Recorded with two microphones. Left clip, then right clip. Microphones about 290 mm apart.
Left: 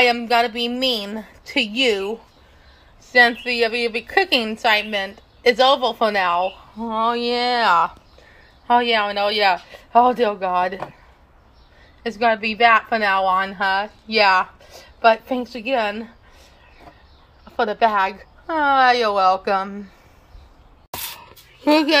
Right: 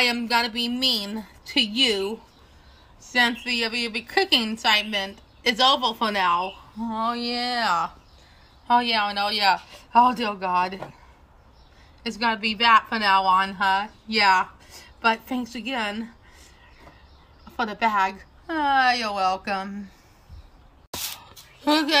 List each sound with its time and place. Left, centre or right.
0.0 s a woman's voice: centre
12.0 s a woman's voice: centre
17.5 s a woman's voice: centre
21.2 s a sound: centre